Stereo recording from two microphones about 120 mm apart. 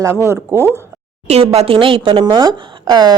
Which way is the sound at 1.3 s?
60° right (ahead or behind).